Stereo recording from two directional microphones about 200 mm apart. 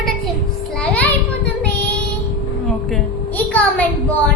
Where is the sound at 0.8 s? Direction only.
5° left (ahead or behind).